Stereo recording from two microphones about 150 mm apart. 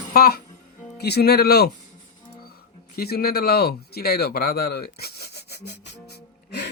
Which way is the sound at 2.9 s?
90° left.